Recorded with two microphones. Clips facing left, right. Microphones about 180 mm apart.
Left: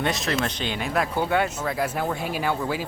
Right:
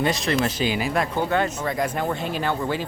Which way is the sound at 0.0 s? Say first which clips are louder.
Right 3 dB; centre (ahead or behind).